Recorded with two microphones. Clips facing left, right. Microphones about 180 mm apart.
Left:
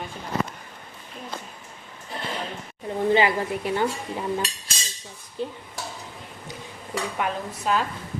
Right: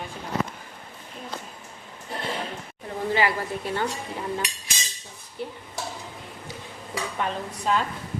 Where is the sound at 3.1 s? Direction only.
20° left (ahead or behind).